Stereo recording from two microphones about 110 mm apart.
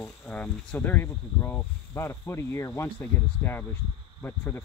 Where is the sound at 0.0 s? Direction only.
10° left (ahead or behind).